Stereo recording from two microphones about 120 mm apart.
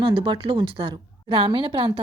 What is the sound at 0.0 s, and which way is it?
A woman's voice, 45° right (ahead or behind).